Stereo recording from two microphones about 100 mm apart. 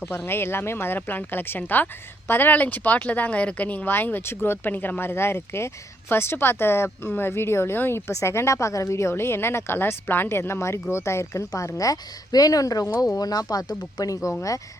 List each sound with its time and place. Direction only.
0.3 s speech: 25° left (ahead or behind)